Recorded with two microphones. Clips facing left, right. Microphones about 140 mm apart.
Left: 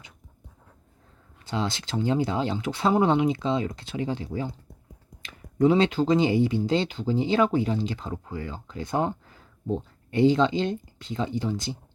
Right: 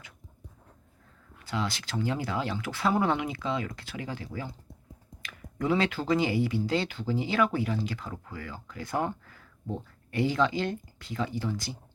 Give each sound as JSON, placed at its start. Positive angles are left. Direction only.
{"t": 1.5, "sound": "speech", "side_deg": 25}